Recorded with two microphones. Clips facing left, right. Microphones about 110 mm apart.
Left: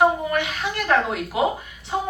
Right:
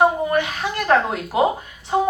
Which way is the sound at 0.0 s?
35° right (ahead or behind).